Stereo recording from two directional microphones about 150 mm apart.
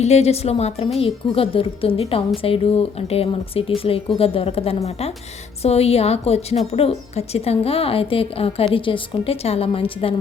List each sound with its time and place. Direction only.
0.0 s a woman's voice: 45° left (ahead or behind)